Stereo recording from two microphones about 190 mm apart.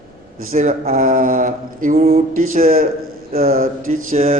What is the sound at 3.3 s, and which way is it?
Mantra, 50° right (ahead or behind).